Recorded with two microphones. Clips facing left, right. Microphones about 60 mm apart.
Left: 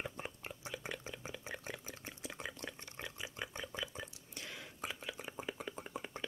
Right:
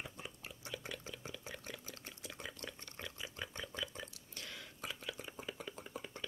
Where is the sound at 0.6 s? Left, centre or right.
Left.